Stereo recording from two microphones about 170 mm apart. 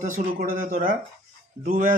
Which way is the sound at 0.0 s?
50° right (ahead or behind).